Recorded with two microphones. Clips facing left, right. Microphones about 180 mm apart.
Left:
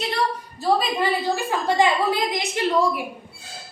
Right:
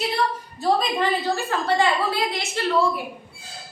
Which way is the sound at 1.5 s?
15° left (ahead or behind).